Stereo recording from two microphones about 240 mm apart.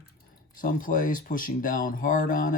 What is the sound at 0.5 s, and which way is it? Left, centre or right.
Speech, left.